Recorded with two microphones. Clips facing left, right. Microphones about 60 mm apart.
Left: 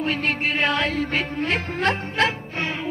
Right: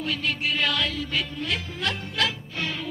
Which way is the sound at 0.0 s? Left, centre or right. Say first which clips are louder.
Left 4 dB; left.